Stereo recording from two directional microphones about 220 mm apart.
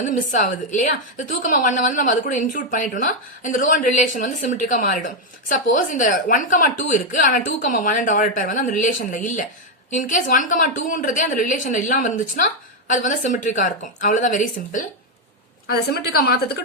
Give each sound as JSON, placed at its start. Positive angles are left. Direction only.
{"t": 0.0, "sound": "a woman's voice", "side_deg": 35}